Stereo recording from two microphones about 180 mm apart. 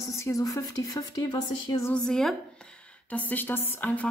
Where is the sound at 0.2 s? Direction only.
20° left (ahead or behind).